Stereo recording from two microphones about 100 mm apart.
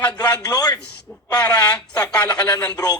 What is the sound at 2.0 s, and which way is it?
Speech, 40° left (ahead or behind).